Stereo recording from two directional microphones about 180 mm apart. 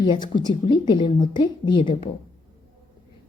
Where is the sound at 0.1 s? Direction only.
25° left (ahead or behind).